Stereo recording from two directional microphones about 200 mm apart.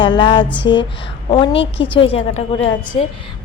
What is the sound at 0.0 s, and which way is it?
A woman's voice, 25° left (ahead or behind).